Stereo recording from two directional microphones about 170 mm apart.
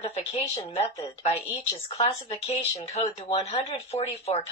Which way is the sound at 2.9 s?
35° left (ahead or behind).